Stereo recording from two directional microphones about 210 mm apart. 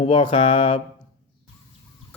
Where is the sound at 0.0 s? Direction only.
25° left (ahead or behind).